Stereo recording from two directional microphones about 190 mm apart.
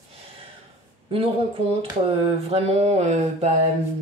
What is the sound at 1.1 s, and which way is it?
Speech, 30° right (ahead or behind).